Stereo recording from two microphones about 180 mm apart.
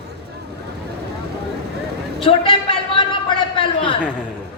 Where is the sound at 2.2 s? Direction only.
30° left (ahead or behind).